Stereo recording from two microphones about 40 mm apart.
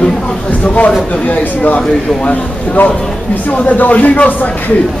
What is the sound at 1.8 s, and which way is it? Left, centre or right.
Speech, left.